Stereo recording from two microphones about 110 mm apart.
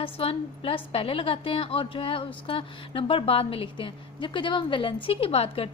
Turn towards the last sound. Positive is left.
turn(degrees=60)  # may be behind; listen again after turning